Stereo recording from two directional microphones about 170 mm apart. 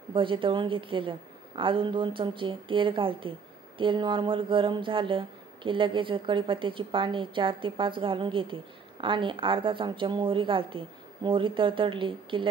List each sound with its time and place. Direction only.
0.1 s a woman's voice: 30° right (ahead or behind)